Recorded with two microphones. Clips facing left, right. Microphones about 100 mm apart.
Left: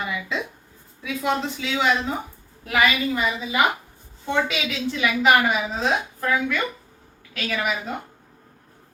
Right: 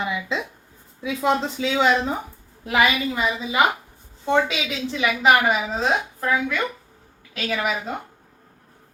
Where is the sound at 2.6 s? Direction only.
20° right (ahead or behind).